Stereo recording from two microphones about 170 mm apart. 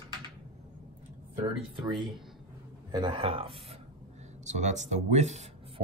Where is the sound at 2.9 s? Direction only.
30° right (ahead or behind).